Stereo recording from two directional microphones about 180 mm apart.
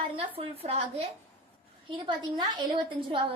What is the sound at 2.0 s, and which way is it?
Speech, 25° right (ahead or behind).